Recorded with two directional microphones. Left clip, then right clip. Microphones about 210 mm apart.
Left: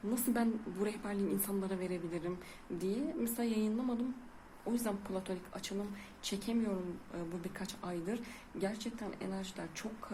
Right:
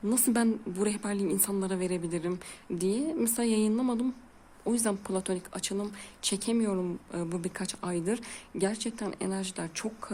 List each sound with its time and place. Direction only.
0.1 s speech: 50° right (ahead or behind)